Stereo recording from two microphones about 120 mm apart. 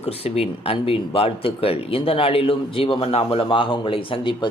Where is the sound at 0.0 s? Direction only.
60° left (ahead or behind).